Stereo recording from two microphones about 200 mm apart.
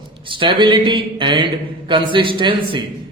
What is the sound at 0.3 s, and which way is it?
Speech, 25° right (ahead or behind).